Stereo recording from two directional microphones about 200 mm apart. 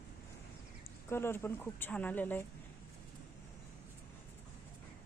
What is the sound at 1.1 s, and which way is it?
Speech, 10° left (ahead or behind).